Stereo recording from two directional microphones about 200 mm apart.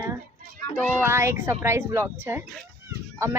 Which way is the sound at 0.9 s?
10° right (ahead or behind).